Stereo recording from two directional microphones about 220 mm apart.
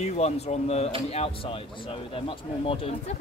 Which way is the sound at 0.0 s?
30° left (ahead or behind).